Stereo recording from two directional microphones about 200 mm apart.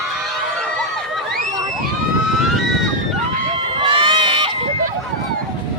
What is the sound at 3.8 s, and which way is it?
Run, 25° right (ahead or behind).